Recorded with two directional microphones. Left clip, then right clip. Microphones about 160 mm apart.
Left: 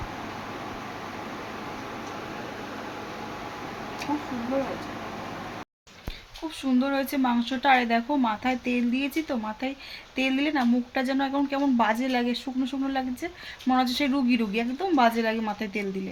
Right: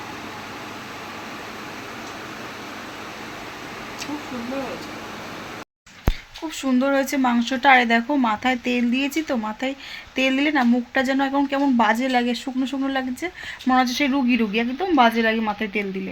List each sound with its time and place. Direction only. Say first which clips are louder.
6.6 s speech: right 6 dB; 25° right (ahead or behind)